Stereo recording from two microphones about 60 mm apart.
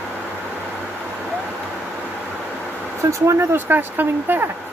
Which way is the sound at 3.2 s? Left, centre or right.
Right.